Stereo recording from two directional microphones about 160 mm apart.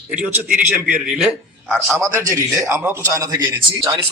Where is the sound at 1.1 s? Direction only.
Centre (ahead or behind).